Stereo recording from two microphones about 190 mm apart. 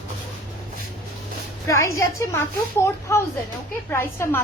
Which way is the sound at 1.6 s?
15° left (ahead or behind).